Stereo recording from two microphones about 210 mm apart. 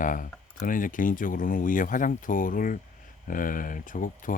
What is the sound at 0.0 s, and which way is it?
Speech, 40° left (ahead or behind).